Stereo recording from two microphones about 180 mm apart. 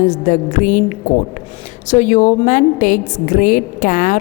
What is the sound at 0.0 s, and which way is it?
A woman's voice, 45° left (ahead or behind).